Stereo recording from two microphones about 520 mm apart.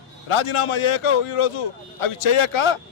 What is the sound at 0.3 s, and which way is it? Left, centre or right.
A man's voice, left.